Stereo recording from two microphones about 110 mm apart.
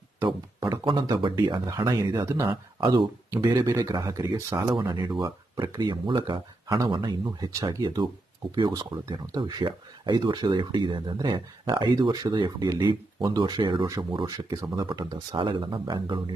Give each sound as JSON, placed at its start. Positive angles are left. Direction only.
{"t": 0.3, "sound": "a sound", "side_deg": -45}
{"t": 1.2, "sound": "speech", "side_deg": -40}
{"t": 2.5, "sound": "speech", "side_deg": -45}
{"t": 4.9, "sound": "speech", "side_deg": -40}
{"t": 13.8, "sound": "speech", "side_deg": -35}